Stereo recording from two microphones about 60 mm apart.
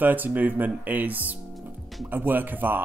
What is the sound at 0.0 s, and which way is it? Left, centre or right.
Speech, right.